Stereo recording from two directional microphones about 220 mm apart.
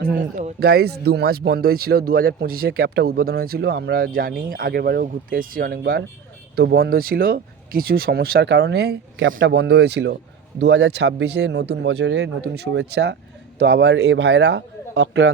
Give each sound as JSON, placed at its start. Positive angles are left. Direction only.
{"t": 0.0, "sound": "a man's voice", "side_deg": -40}